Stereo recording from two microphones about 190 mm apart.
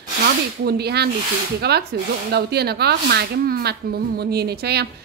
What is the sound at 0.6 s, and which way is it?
Speech, 55° right (ahead or behind).